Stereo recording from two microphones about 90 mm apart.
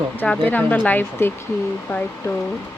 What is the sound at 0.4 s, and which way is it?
Speech, 20° left (ahead or behind).